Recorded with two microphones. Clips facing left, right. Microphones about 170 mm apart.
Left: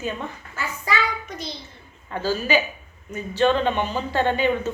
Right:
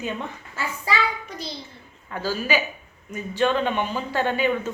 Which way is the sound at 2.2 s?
10° right (ahead or behind).